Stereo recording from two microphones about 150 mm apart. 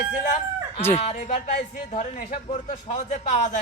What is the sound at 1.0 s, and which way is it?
Speech, 50° left (ahead or behind).